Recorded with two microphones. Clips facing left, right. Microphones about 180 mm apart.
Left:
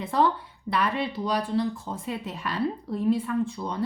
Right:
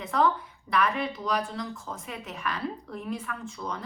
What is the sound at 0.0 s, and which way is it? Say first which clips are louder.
Speech: left 2 dB; 30° left (ahead or behind).